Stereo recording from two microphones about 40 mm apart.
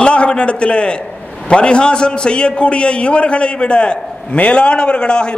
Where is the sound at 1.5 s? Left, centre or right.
Left.